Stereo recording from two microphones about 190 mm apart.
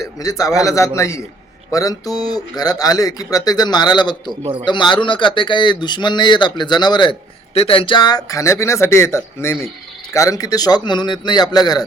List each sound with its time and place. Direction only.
0.0 s a man's voice: 20° left (ahead or behind)